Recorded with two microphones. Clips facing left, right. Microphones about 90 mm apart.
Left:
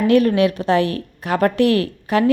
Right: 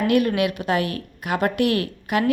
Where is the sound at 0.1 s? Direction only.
35° left (ahead or behind).